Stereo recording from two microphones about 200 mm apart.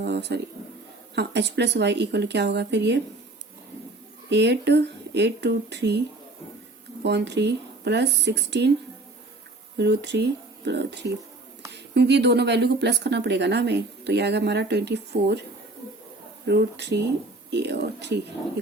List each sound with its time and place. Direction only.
0.0 s speech: 55° right (ahead or behind)
4.3 s speech: 60° right (ahead or behind)
7.0 s speech: 60° right (ahead or behind)
9.7 s speech: 55° right (ahead or behind)
16.5 s speech: 55° right (ahead or behind)